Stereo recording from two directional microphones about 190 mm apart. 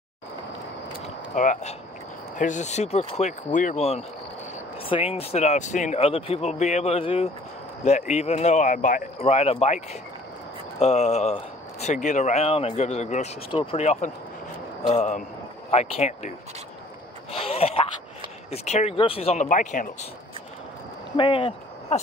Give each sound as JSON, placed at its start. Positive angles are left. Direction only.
{"t": 1.3, "sound": "speech", "side_deg": 40}
{"t": 5.1, "sound": "speech", "side_deg": 35}
{"t": 10.8, "sound": "speech", "side_deg": 35}
{"t": 17.3, "sound": "a sound", "side_deg": 30}
{"t": 18.5, "sound": "speech", "side_deg": 35}
{"t": 21.2, "sound": "speech", "side_deg": 25}